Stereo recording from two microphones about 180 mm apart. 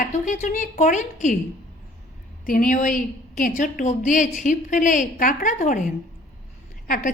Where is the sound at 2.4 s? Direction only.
50° left (ahead or behind).